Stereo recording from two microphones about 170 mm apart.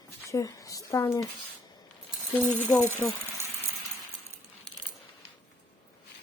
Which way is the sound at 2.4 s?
10° left (ahead or behind).